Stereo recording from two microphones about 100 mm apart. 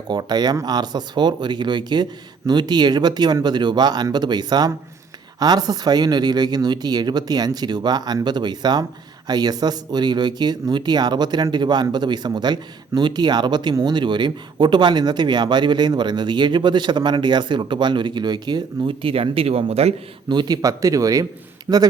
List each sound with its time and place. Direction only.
0.1 s speech: 45° right (ahead or behind); by 19.9 s 85° right
20.2 s speech: 50° right (ahead or behind); by 21.8 s 30° right (ahead or behind)